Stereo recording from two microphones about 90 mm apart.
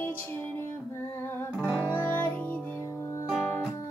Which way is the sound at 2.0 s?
20° left (ahead or behind).